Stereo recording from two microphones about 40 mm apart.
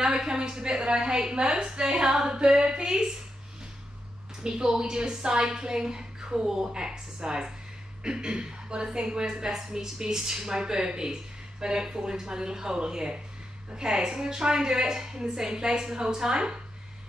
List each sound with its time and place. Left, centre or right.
0.0 s a woman's voice: centre
4.4 s a woman's voice: centre